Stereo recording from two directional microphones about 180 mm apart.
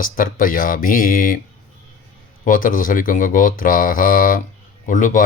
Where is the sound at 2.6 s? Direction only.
50° left (ahead or behind).